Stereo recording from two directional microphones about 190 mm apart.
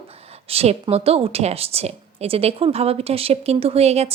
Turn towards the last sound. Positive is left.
turn(degrees=-35)  # may be behind; listen again after turning